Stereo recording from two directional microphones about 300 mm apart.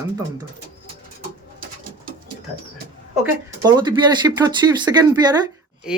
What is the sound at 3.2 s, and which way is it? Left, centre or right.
Speech, centre.